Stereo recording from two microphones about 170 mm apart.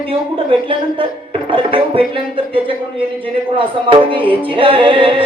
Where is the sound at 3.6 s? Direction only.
30° right (ahead or behind).